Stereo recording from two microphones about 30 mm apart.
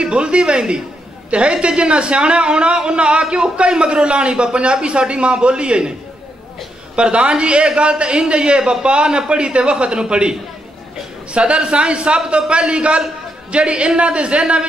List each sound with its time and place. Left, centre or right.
0.0 s a man's voice: right
7.0 s a man's voice: right
11.3 s a man's voice: right